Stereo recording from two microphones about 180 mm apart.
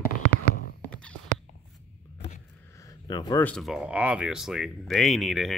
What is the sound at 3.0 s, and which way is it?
Speech, 20° left (ahead or behind).